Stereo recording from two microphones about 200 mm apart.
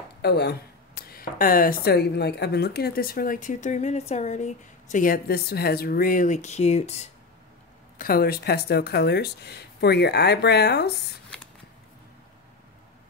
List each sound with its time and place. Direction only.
0.2 s a woman's voice: 55° left (ahead or behind); by 7.1 s 35° left (ahead or behind)
8.0 s speech: 50° left (ahead or behind)